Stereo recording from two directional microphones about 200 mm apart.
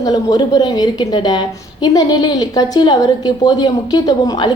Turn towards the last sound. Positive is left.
turn(degrees=20)  # may be behind; listen again after turning